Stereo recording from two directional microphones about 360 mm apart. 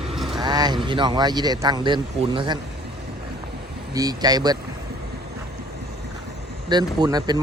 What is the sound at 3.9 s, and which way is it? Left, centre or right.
Speech, centre.